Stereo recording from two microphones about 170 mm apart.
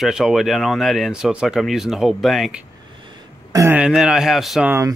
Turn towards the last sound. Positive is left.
turn(degrees=0)  # may be behind; listen again after turning